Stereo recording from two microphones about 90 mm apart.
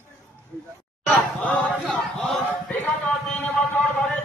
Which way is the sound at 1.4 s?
Centre (ahead or behind).